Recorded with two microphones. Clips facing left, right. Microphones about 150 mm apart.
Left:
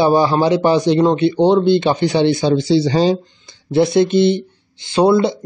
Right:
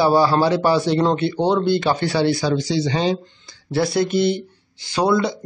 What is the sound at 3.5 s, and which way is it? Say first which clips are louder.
Speech: left 6 dB; 20° left (ahead or behind).